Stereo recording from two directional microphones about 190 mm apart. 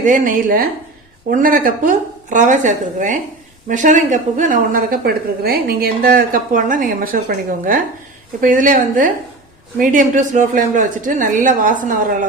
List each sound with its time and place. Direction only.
0.0 s a woman's voice: 45° right (ahead or behind)